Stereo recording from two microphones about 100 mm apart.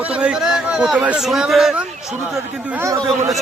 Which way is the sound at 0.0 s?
15° right (ahead or behind).